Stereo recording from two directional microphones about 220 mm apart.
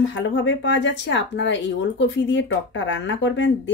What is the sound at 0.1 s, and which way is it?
Speech, 55° left (ahead or behind).